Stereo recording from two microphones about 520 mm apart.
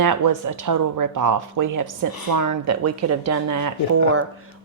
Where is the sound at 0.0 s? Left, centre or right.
Right.